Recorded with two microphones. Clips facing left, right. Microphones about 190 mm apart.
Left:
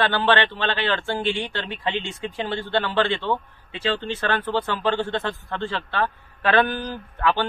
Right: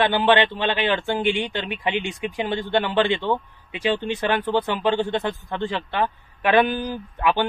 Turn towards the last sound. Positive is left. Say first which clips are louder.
# right 1 dB
turn(degrees=-15)  # may be behind; listen again after turning